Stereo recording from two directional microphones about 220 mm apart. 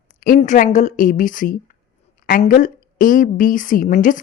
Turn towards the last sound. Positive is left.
turn(degrees=35)  # may be behind; listen again after turning